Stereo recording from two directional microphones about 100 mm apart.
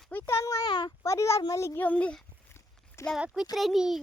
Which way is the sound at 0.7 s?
45° left (ahead or behind).